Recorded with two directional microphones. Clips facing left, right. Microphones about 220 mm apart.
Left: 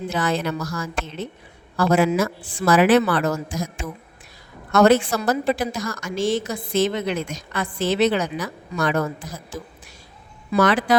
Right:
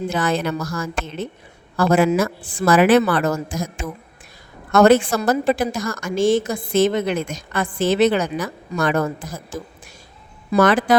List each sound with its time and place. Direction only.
0.1 s a woman's voice: 50° right (ahead or behind)